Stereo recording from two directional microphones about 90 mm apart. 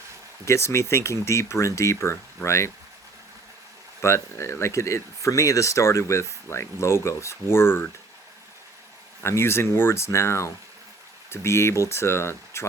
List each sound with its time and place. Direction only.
0.4 s speech: 30° left (ahead or behind)
4.0 s speech: 30° left (ahead or behind)
9.2 s speech: 30° left (ahead or behind)